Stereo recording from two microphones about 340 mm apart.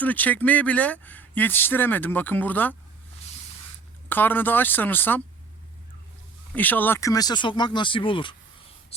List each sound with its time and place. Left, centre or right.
0.0 s speech: centre
4.1 s speech: centre
6.6 s speech: centre
8.9 s a sound: centre